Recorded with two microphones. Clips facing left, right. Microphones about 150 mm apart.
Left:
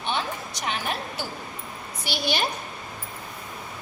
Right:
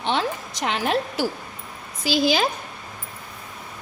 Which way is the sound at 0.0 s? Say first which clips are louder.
Right 5 dB; 90° right.